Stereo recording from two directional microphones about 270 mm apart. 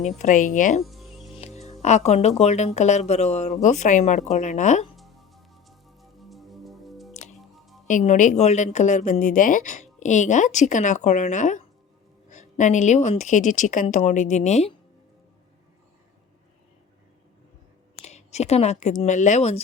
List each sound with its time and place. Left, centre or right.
0.0 s a woman's voice: left
0.9 s music: centre
1.3 s a woman's voice: left
4.9 s music: centre
7.1 s music: left
7.3 s music: centre
7.9 s a woman's voice: left
18.0 s speech: left